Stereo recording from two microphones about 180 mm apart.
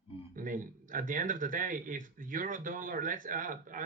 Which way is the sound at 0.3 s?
50° right (ahead or behind).